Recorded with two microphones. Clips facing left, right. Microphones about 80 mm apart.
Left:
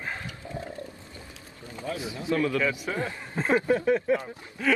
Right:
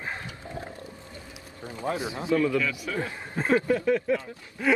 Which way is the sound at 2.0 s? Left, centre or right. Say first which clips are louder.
Right 3 dB; right.